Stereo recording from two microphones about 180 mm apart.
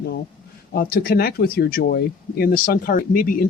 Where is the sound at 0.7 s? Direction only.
55° left (ahead or behind).